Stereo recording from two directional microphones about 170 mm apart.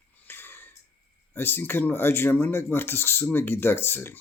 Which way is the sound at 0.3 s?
10° left (ahead or behind).